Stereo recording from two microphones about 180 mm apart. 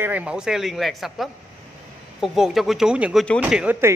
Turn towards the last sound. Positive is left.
turn(degrees=-10)  # may be behind; listen again after turning